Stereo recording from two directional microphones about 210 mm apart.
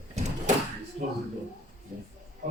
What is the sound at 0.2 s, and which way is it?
Door, 30° right (ahead or behind).